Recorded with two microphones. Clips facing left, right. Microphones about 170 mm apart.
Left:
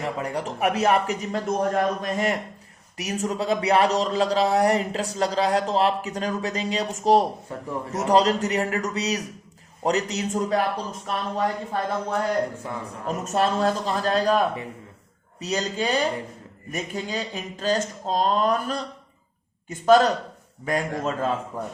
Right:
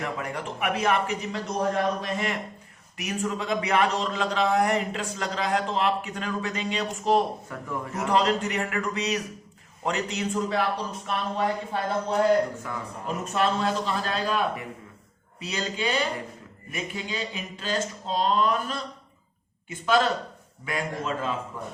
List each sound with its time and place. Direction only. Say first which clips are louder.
0.0 s a man's voice: left 4 dB; 35° left (ahead or behind)
13.1 s a man's voice: left 3 dB; 40° left (ahead or behind)